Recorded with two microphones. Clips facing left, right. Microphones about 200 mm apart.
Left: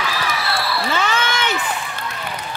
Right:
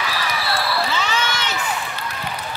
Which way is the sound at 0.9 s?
55° left (ahead or behind).